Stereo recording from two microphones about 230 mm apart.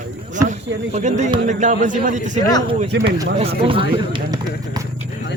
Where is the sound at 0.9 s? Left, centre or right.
Right.